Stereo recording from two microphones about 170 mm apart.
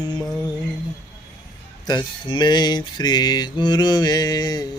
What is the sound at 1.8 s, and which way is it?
Mantra, 25° left (ahead or behind).